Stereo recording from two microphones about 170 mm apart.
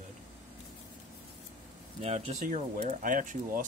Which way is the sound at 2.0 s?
35° right (ahead or behind).